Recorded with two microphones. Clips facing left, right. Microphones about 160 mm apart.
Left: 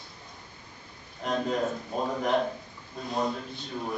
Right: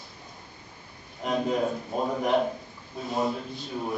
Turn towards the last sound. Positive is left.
turn(degrees=-5)  # may be behind; listen again after turning